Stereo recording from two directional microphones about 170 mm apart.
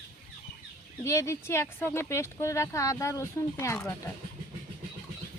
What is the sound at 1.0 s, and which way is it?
Speech, 15° left (ahead or behind).